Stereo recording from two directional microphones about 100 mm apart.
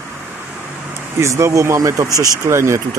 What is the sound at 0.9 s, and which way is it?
Speech, 25° right (ahead or behind).